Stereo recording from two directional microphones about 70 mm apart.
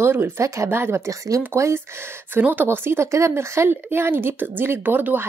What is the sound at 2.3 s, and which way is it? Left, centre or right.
Speech, right.